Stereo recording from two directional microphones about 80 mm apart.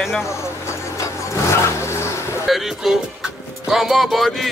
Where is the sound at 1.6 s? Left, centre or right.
Left.